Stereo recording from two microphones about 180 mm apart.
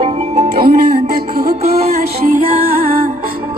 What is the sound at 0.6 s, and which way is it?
Music, 60° right (ahead or behind).